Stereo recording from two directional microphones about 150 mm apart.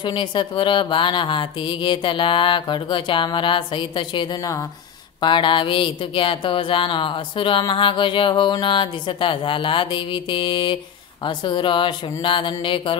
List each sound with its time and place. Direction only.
0.0 s speech: 30° left (ahead or behind)